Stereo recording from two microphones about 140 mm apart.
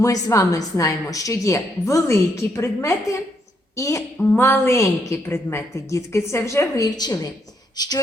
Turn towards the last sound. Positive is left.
turn(degrees=30)  # may be behind; listen again after turning